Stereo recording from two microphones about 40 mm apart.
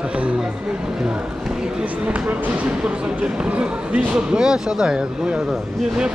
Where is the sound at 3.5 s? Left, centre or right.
Right.